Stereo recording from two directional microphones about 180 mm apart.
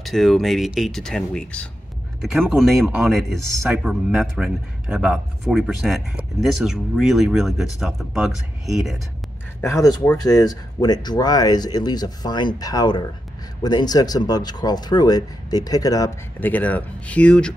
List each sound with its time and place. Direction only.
0.0 s a man's voice: centre (ahead or behind)
9.6 s speech: 15° left (ahead or behind)
16.3 s speech: 10° left (ahead or behind)